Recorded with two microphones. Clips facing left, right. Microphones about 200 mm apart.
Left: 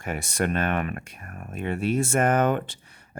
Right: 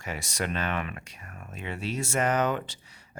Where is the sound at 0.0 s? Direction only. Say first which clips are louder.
Left 6 dB; 55° left (ahead or behind).